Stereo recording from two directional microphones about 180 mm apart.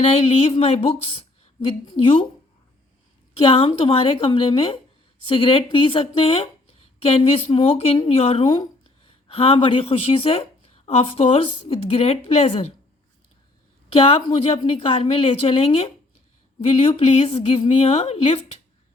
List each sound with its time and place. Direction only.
0.0 s a woman's voice: 35° left (ahead or behind)
3.4 s a woman's voice: 30° left (ahead or behind)
8.4 s a woman's voice: 20° left (ahead or behind)
13.9 s a woman's voice: 30° left (ahead or behind)